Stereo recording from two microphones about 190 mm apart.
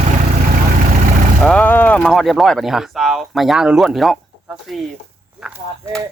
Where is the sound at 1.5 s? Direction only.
10° left (ahead or behind).